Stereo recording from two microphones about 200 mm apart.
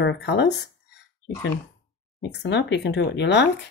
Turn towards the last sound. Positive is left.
turn(degrees=60)  # may be behind; listen again after turning